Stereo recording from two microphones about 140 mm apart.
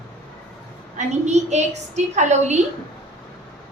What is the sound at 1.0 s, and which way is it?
A woman's voice, 55° right (ahead or behind).